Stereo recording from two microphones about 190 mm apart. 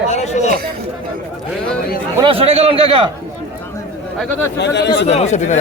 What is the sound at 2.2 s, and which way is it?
Speech, 30° right (ahead or behind).